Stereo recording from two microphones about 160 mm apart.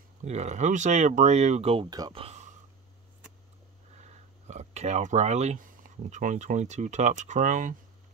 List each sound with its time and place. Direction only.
0.2 s speech: 45° right (ahead or behind)
1.9 s speech: 25° right (ahead or behind)
2.2 s a sound: 45° right (ahead or behind)
4.0 s speech: 45° right (ahead or behind)